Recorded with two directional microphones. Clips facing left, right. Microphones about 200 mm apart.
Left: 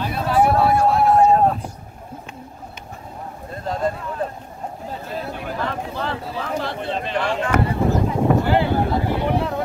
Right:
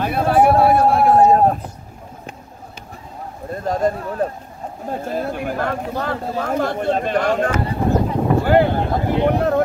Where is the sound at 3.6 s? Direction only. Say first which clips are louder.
Right 4 dB; 45° right (ahead or behind).